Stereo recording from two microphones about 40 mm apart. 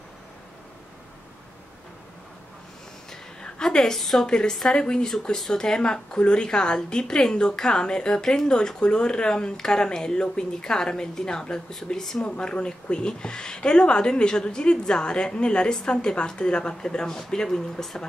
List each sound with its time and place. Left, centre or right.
3.1 s a sound: centre
4.3 s a woman's voice: left
12.2 s a woman's voice: left